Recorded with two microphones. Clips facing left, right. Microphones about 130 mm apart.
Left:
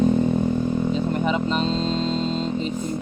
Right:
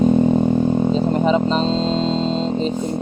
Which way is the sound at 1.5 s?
30° right (ahead or behind).